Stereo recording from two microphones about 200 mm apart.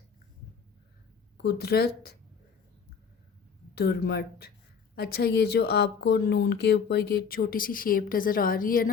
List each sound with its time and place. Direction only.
1.5 s speech: 50° left (ahead or behind)
3.8 s speech: 55° left (ahead or behind)